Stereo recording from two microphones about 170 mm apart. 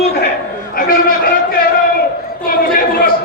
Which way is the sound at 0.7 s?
55° left (ahead or behind).